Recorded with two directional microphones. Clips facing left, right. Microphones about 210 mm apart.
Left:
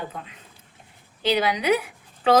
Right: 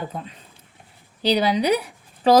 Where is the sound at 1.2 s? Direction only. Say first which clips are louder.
Right 2 dB; 35° right (ahead or behind).